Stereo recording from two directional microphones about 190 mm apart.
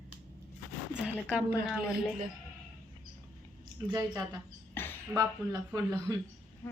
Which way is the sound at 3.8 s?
20° right (ahead or behind).